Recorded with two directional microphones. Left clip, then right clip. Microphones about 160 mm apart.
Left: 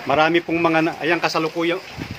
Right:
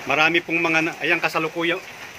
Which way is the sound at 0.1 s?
30° left (ahead or behind).